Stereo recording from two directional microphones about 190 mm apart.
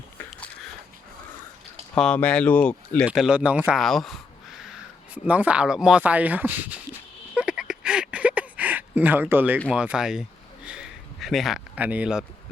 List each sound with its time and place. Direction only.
0.3 s biting: 5° left (ahead or behind)
2.0 s speech: 5° left (ahead or behind)
3.1 s speech: 5° right (ahead or behind)
7.3 s a sound: 5° right (ahead or behind)